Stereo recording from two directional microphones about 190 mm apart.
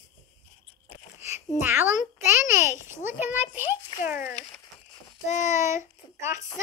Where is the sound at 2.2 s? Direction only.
15° right (ahead or behind).